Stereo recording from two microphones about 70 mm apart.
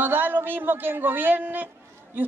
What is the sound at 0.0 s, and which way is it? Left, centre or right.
A man's voice, right.